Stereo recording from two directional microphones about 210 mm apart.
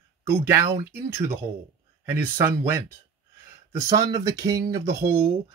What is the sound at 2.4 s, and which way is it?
Speech, 10° right (ahead or behind).